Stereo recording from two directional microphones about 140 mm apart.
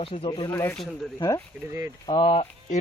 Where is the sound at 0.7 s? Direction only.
5° left (ahead or behind).